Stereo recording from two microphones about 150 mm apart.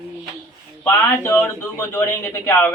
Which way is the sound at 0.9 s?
15° left (ahead or behind).